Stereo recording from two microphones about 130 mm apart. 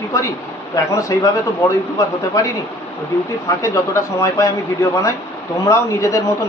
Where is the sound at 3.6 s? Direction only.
25° left (ahead or behind).